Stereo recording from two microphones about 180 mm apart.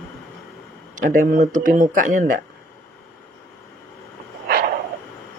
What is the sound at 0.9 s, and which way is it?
Speech, 50° right (ahead or behind).